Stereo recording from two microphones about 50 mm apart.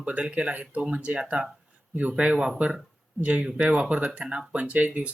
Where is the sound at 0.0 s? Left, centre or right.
Right.